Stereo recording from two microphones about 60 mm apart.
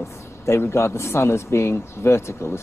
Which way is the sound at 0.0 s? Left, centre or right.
Left.